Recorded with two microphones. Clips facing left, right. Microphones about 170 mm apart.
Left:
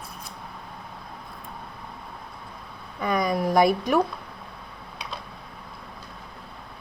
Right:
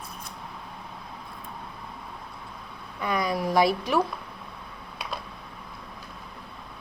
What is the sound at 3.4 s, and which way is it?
Speech, 50° left (ahead or behind).